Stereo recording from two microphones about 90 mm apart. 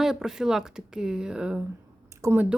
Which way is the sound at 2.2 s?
30° right (ahead or behind).